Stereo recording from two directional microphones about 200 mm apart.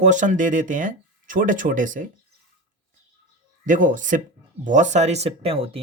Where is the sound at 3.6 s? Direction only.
40° right (ahead or behind).